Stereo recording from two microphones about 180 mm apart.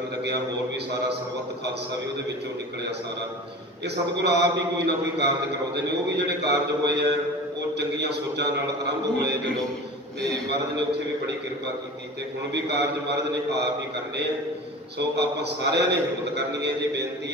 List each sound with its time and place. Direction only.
3.8 s a man's voice: 70° right (ahead or behind)
15.0 s a man's voice: 70° right (ahead or behind)